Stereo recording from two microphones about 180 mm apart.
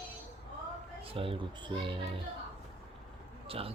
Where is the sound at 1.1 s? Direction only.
30° right (ahead or behind).